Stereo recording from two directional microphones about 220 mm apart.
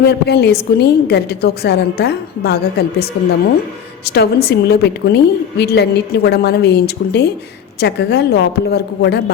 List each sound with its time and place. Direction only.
0.1 s a woman's voice: 50° left (ahead or behind)